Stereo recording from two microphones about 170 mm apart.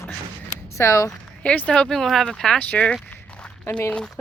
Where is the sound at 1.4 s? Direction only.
5° left (ahead or behind).